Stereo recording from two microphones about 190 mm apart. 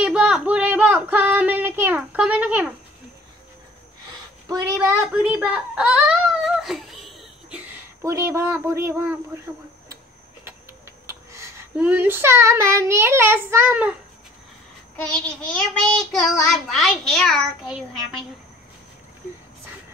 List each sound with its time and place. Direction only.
0.0 s a sound: 5° right (ahead or behind)
4.5 s speech: 15° right (ahead or behind)
5.1 s whimper: 5° right (ahead or behind)
8.0 s speech: 15° right (ahead or behind)
11.1 s child singing: 15° right (ahead or behind)
15.0 s a child's voice: 5° left (ahead or behind)
16.7 s a child's voice: centre (ahead or behind)